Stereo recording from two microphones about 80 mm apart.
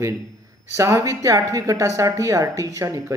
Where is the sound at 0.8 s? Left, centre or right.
Right.